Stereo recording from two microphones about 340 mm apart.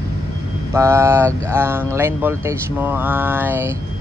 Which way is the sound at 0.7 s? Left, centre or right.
Centre.